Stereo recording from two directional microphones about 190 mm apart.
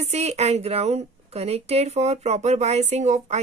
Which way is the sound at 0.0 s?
35° right (ahead or behind).